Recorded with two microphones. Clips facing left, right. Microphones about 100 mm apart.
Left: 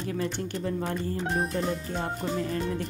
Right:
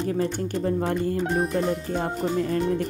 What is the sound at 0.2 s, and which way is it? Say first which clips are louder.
Speech: right 5 dB; 40° right (ahead or behind).